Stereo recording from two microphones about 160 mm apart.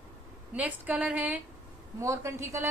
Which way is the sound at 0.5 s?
10° right (ahead or behind).